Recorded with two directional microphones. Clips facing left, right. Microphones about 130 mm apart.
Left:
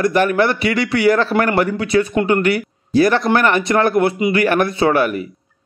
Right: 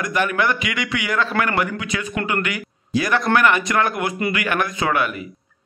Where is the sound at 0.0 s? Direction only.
35° left (ahead or behind).